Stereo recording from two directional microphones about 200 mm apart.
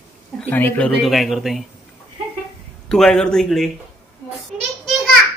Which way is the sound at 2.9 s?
5° left (ahead or behind).